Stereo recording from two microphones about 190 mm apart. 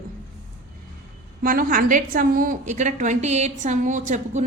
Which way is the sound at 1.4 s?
50° right (ahead or behind).